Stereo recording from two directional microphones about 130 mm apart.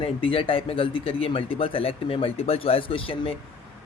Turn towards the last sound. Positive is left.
turn(degrees=45)  # may be behind; listen again after turning